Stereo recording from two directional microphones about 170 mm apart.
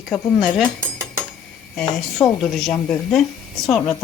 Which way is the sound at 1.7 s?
5° left (ahead or behind).